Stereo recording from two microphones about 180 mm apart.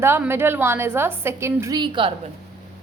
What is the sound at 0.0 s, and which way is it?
A woman's voice, 15° right (ahead or behind).